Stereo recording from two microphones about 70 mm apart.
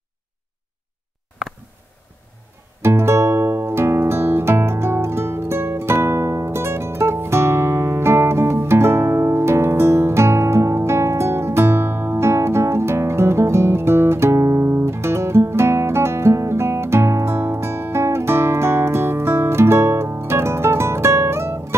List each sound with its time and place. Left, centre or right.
2.8 s music: right